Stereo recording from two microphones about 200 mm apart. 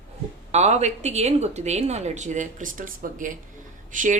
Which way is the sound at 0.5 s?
35° right (ahead or behind).